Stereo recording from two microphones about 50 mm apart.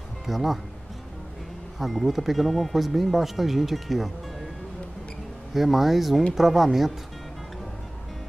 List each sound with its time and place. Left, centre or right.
0.3 s speech: centre
1.8 s speech: centre
5.5 s speech: centre